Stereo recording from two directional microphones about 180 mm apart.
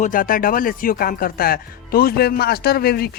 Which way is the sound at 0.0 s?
50° left (ahead or behind).